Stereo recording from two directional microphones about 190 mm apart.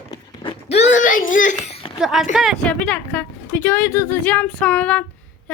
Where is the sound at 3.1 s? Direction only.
10° left (ahead or behind).